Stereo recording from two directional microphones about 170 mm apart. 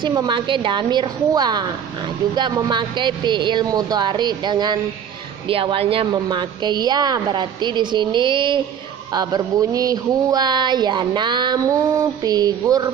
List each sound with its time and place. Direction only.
0.0 s speech: 25° right (ahead or behind)